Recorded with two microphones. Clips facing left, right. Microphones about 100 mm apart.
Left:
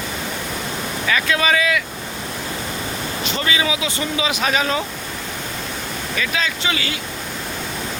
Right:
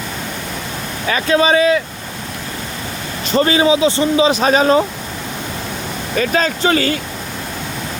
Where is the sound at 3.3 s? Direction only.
40° right (ahead or behind).